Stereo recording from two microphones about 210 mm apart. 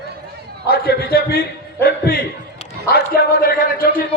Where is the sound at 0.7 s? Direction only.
45° left (ahead or behind).